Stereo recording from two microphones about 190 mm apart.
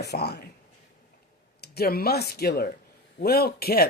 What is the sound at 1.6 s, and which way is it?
Speech, 55° left (ahead or behind).